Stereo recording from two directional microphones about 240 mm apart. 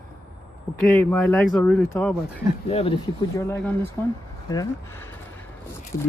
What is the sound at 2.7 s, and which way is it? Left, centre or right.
Speech, left.